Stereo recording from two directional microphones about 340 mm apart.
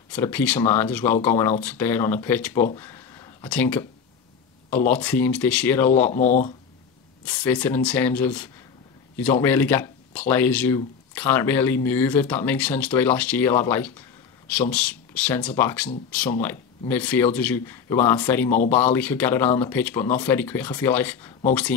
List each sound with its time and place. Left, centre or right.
0.1 s speech: centre
6.1 s speech: left
7.2 s speech: centre